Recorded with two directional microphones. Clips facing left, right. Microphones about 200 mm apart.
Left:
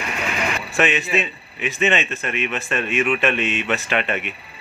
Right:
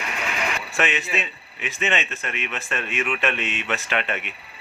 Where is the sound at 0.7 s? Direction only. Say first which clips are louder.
Left 6 dB; 10° left (ahead or behind).